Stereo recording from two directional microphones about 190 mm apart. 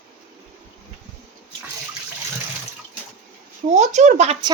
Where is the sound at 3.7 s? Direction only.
40° right (ahead or behind).